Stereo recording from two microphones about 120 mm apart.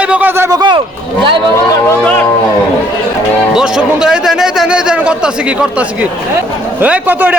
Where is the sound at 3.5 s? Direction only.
5° right (ahead or behind).